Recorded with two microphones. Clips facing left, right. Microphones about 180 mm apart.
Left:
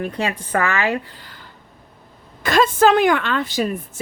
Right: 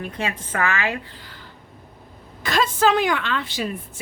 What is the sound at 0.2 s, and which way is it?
Speech, 35° left (ahead or behind).